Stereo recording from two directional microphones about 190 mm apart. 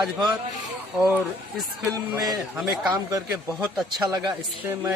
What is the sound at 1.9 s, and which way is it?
Speech, 20° right (ahead or behind).